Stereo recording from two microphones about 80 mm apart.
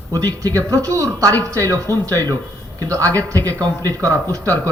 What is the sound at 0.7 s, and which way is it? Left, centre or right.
A man's voice, right.